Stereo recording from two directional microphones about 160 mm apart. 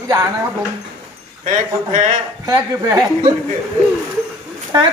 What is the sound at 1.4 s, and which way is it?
Speech, 50° right (ahead or behind).